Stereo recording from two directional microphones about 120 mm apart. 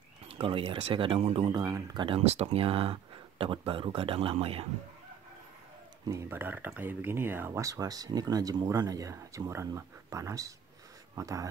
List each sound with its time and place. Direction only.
0.3 s speech: 50° right (ahead or behind)
1.5 s speech: 35° right (ahead or behind)
2.0 s speech: 55° right (ahead or behind)
6.0 s speech: 20° right (ahead or behind)